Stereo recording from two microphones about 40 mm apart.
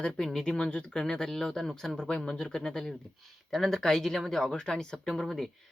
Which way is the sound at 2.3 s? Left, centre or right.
Left.